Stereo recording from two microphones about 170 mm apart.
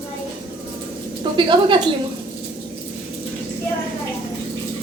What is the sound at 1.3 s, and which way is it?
Speech, 30° right (ahead or behind).